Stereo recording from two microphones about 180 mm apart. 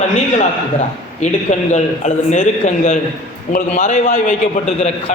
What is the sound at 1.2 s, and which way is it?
A man's voice, 40° left (ahead or behind).